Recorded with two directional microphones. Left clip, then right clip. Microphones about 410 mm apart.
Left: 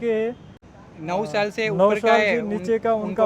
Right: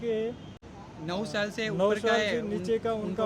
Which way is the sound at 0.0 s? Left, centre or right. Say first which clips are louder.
Left 8 dB; left.